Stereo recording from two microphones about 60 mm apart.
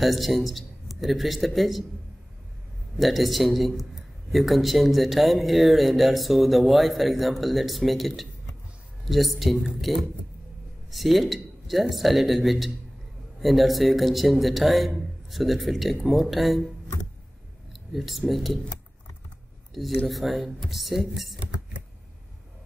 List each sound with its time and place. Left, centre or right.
0.0 s speech: centre
3.0 s speech: centre
17.9 s speech: centre
19.7 s speech: centre
21.4 s a sound: right